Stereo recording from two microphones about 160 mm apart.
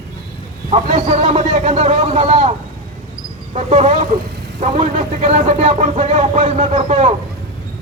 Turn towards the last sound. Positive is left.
turn(degrees=-45)  # may be behind; listen again after turning